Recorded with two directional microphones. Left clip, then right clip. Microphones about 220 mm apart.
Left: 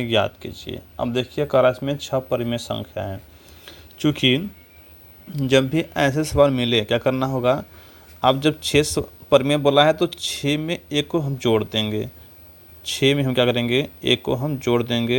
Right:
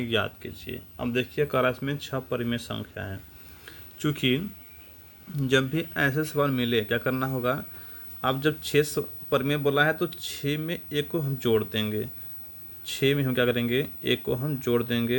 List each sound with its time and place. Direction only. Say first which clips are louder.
0.0 s a man's voice: left 7 dB; 25° left (ahead or behind)
3.7 s a sound: left 8 dB; 20° left (ahead or behind)
5.4 s a man's voice: left 6 dB; 20° left (ahead or behind)